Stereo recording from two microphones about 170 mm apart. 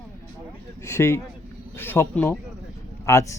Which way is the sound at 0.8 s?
15° left (ahead or behind).